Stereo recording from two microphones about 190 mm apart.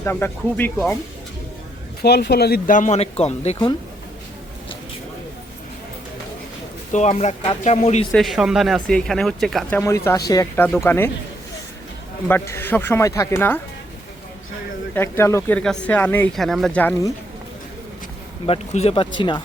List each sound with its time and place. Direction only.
0.0 s speech: 10° left (ahead or behind)
2.0 s speech: 60° left (ahead or behind); by 3.8 s 30° left (ahead or behind)
6.9 s speech: 35° left (ahead or behind)
8.1 s speech: centre (ahead or behind)
12.3 s speech: 10° left (ahead or behind)
14.9 s speech: 10° left (ahead or behind)
18.4 s speech: 30° left (ahead or behind)